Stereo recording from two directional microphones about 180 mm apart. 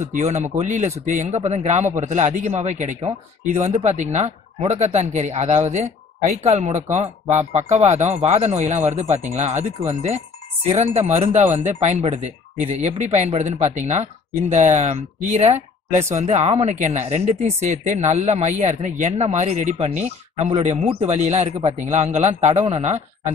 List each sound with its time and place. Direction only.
0.0 s speech: 40° right (ahead or behind)